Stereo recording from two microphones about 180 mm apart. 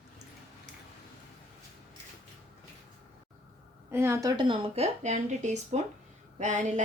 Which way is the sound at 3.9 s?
15° right (ahead or behind).